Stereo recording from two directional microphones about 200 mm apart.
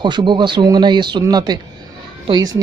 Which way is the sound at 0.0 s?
25° right (ahead or behind).